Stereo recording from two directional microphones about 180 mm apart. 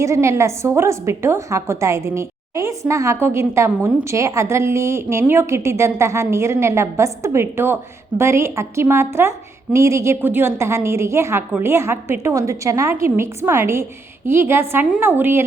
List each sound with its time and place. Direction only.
0.0 s a woman's voice: 15° right (ahead or behind)